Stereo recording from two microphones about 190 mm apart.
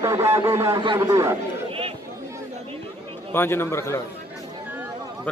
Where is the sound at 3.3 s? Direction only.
10° left (ahead or behind).